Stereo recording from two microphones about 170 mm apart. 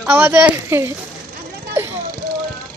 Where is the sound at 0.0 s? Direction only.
10° right (ahead or behind).